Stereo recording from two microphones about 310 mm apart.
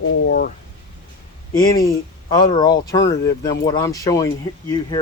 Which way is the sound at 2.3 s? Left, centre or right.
Centre.